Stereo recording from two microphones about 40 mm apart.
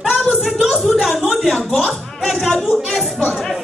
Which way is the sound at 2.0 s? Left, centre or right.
Centre.